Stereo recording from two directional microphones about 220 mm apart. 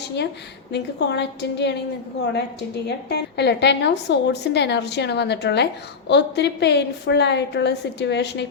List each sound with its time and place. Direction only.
0.7 s a woman's voice: 50° left (ahead or behind)
2.8 s a woman's voice: 50° left (ahead or behind)